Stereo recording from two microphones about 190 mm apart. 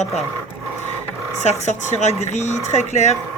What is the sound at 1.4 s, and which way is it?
Speech, 40° left (ahead or behind).